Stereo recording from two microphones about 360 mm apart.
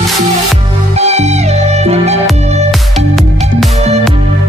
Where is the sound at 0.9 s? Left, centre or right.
Centre.